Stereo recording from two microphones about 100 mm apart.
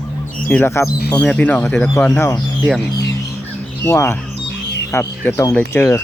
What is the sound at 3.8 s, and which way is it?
Speech, 25° left (ahead or behind).